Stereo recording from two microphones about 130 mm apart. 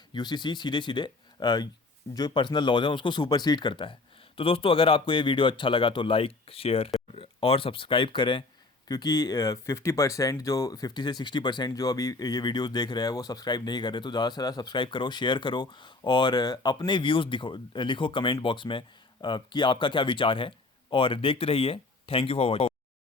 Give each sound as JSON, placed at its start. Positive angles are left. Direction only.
{"t": 0.1, "sound": "speech", "side_deg": 35}